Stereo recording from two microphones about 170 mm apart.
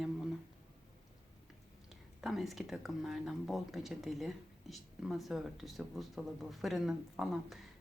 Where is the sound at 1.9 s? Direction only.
Centre (ahead or behind).